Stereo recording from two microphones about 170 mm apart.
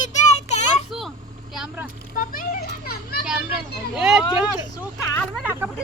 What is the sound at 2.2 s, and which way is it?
Speech, 55° left (ahead or behind).